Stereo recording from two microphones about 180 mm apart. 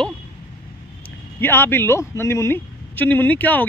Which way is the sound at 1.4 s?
10° left (ahead or behind).